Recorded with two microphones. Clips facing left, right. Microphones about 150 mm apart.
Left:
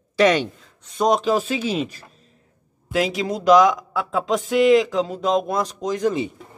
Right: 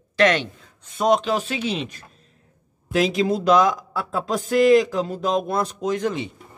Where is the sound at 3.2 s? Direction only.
30° right (ahead or behind).